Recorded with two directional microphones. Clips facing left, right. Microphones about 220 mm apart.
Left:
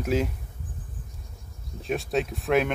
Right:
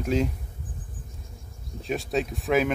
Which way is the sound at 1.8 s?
Centre (ahead or behind).